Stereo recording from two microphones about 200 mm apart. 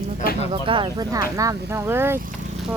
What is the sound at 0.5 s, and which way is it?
Speech, 25° right (ahead or behind).